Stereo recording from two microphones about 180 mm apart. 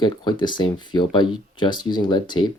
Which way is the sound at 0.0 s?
25° left (ahead or behind).